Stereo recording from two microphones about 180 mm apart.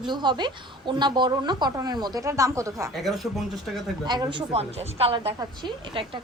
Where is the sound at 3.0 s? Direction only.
Centre (ahead or behind).